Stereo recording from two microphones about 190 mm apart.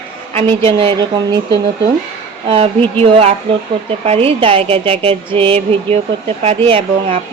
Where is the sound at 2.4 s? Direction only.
30° right (ahead or behind).